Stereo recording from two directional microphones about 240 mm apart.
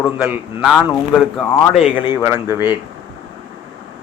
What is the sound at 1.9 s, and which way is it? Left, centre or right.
Speech, centre.